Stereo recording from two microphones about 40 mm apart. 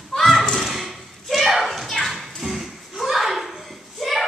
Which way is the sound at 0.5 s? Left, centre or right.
Centre.